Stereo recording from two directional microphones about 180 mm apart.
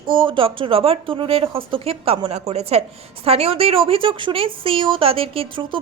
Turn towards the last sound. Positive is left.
turn(degrees=-30)  # may be behind; listen again after turning